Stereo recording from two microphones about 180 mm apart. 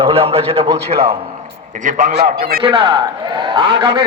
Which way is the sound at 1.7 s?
45° right (ahead or behind).